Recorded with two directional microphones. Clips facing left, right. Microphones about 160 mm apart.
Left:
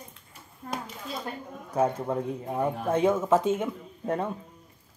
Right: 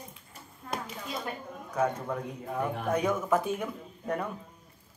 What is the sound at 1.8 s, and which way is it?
Speech, 30° left (ahead or behind).